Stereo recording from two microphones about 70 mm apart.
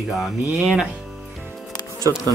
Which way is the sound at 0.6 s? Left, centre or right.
Centre.